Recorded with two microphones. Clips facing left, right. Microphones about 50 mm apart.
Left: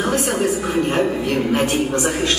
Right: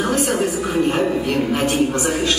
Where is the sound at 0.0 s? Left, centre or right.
Centre.